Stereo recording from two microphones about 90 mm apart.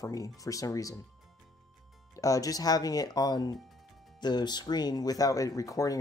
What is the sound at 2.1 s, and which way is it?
Speech, 40° left (ahead or behind).